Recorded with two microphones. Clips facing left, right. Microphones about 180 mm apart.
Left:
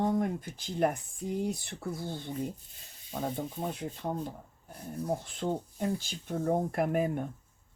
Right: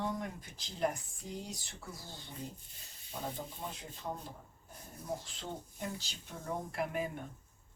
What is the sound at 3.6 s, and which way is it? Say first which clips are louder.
Speech: left 9 dB; 60° left (ahead or behind).